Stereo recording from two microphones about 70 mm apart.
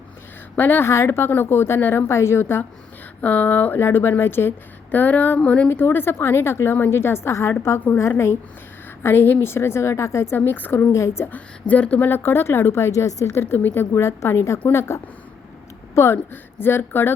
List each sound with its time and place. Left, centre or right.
0.5 s speech: left
0.9 s speech: left
3.2 s speech: left
5.6 s speech: left
10.9 s speech: left
11.3 s speech: left
13.3 s speech: left
13.6 s speech: left
13.9 s a woman's voice: left
16.1 s speech: left